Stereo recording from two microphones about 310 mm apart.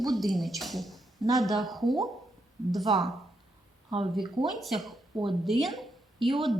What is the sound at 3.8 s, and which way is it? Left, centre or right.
Speech, centre.